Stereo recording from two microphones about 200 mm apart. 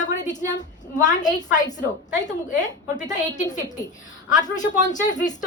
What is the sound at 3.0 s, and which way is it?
A woman's voice, 40° left (ahead or behind).